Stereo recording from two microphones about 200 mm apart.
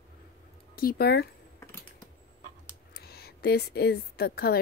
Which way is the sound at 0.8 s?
50° left (ahead or behind).